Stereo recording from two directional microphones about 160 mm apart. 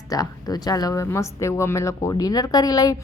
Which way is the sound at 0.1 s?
25° left (ahead or behind).